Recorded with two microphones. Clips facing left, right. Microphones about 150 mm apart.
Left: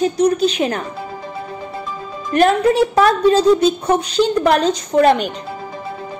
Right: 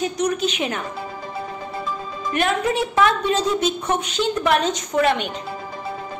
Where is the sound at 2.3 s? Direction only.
40° left (ahead or behind).